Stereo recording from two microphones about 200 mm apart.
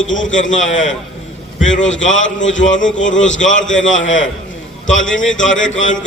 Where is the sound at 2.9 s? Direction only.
40° left (ahead or behind).